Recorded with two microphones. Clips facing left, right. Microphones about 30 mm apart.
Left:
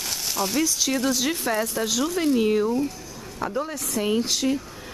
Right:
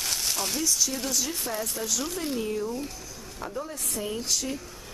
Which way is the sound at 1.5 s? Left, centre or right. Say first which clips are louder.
Left 7 dB; left.